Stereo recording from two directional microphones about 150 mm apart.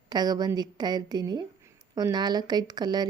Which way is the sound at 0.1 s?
25° right (ahead or behind).